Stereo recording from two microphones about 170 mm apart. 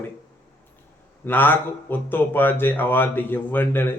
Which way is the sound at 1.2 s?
10° left (ahead or behind).